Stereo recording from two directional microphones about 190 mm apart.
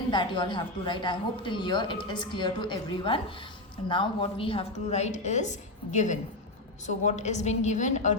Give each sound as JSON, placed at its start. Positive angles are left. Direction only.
{"t": 0.1, "sound": "a woman's voice", "side_deg": 25}